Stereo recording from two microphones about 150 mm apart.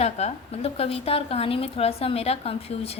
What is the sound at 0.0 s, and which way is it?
A woman's voice, 45° left (ahead or behind).